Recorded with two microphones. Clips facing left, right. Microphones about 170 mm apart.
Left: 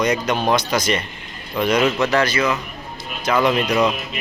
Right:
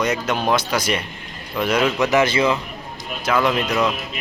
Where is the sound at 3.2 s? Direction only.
Centre (ahead or behind).